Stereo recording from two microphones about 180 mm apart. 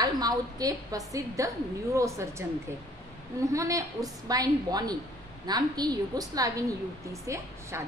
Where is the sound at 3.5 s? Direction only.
20° right (ahead or behind).